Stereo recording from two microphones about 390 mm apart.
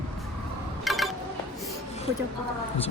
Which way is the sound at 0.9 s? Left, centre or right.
Centre.